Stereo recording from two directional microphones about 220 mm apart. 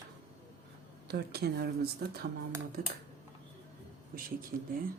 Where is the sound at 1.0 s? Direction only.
45° right (ahead or behind).